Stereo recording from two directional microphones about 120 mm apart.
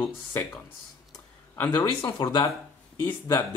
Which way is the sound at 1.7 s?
35° left (ahead or behind).